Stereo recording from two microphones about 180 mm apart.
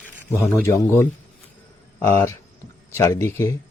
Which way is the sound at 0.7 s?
15° left (ahead or behind).